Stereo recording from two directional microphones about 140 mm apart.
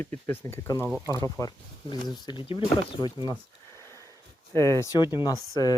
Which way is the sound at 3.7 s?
20° left (ahead or behind).